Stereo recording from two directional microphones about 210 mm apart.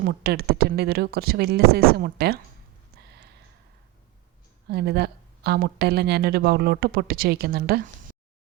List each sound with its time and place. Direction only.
0.0 s speech: 50° right (ahead or behind)
3.1 s a sound: 50° right (ahead or behind)
4.7 s speech: 50° right (ahead or behind)